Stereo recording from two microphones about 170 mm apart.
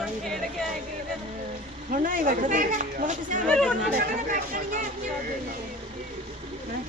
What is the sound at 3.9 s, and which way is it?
Speech, 55° right (ahead or behind).